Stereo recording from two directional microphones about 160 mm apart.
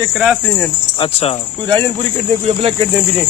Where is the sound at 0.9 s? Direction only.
35° left (ahead or behind).